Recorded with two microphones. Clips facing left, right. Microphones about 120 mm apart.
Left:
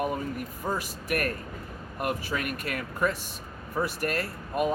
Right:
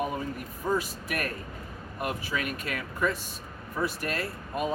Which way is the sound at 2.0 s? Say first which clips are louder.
Left 2 dB; 50° left (ahead or behind).